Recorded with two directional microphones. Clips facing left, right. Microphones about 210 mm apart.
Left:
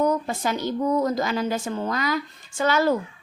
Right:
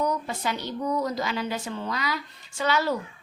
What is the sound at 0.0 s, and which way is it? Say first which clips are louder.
A woman's voice: left 5 dB; 50° left (ahead or behind).